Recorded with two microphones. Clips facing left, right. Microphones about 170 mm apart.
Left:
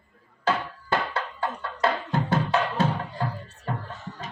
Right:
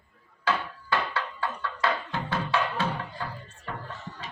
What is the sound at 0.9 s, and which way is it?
Music, 45° left (ahead or behind).